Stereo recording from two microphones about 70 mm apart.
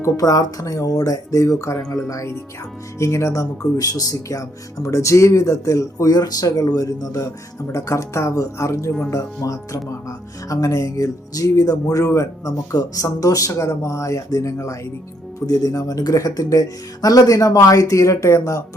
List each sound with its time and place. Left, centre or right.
0.2 s speech: left
7.7 s speech: left